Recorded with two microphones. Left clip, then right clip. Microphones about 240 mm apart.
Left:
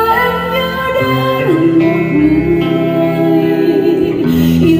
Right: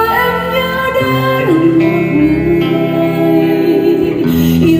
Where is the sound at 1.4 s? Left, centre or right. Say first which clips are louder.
Even; right.